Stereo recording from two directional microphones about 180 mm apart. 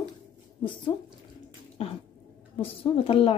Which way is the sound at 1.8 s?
30° left (ahead or behind).